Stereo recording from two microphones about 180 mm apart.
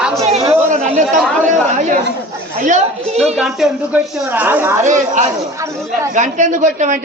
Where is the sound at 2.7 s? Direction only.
40° right (ahead or behind).